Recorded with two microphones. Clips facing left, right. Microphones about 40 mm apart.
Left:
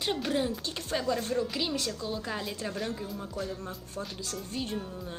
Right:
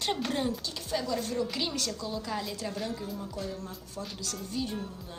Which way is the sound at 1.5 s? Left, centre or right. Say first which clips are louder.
Left 1 dB; centre.